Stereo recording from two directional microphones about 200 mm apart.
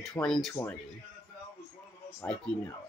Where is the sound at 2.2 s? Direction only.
10° left (ahead or behind).